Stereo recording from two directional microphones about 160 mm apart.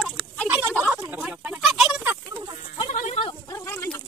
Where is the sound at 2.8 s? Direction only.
45° left (ahead or behind).